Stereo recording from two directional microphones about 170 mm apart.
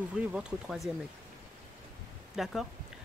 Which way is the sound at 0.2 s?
5° right (ahead or behind).